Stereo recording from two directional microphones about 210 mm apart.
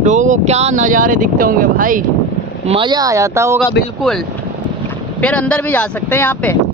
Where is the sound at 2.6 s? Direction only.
25° right (ahead or behind).